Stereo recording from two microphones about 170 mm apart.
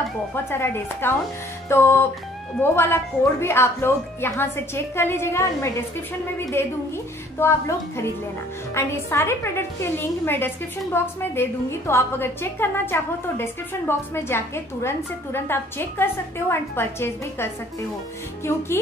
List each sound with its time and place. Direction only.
0.5 s a woman's voice: 15° left (ahead or behind)